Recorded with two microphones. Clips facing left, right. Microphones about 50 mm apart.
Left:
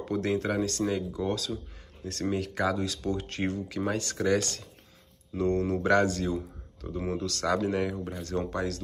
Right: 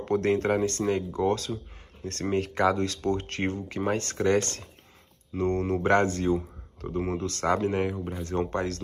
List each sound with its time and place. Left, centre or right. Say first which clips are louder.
0.0 s speech: right 4 dB; right
0.8 s speech: right 4 dB; right
7.9 s speech: right 1 dB; centre
8.2 s speech: right 3 dB; right
8.5 s speech: right 2 dB; right